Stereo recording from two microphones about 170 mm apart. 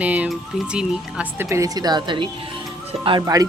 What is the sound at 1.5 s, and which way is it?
A woman's voice, 20° right (ahead or behind).